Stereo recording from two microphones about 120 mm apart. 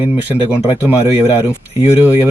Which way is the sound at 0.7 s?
15° right (ahead or behind).